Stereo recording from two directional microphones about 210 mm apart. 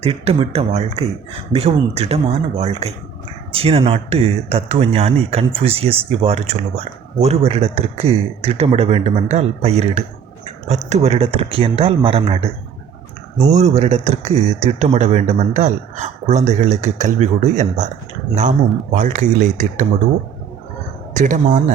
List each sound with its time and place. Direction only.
0.0 s speech: 30° right (ahead or behind)
13.5 s speech: 30° right (ahead or behind)
18.9 s speech: 40° right (ahead or behind)
21.1 s speech: 35° right (ahead or behind)